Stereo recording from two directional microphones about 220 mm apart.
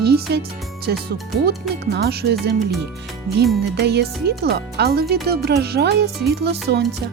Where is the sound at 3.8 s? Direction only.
50° right (ahead or behind).